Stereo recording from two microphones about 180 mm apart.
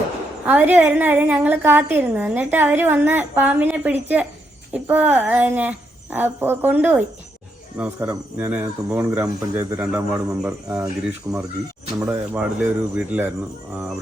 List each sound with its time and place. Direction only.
0.4 s a woman's voice: 10° right (ahead or behind)